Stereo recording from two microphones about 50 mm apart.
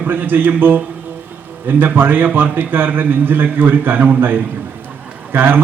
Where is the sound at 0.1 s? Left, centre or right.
Right.